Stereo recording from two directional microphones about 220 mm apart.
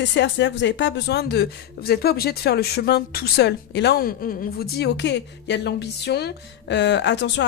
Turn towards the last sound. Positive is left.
turn(degrees=55)  # may be behind; listen again after turning